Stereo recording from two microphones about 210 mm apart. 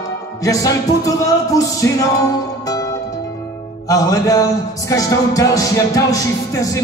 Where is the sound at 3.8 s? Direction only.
15° left (ahead or behind).